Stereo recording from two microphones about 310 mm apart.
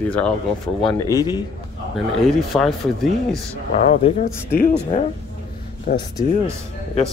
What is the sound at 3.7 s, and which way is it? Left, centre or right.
Speech, left.